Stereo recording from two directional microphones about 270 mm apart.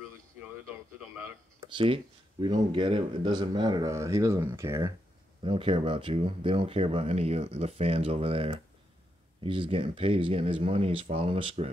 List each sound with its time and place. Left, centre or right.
1.7 s speech: centre